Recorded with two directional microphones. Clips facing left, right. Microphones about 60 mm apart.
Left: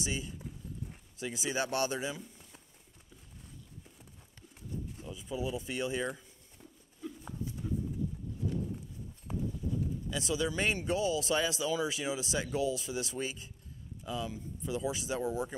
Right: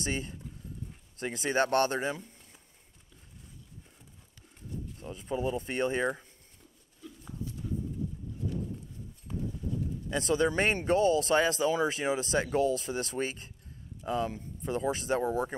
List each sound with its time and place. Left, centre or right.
0.0 s speech: right
5.1 s speech: right
6.6 s a sound: centre
10.0 s speech: right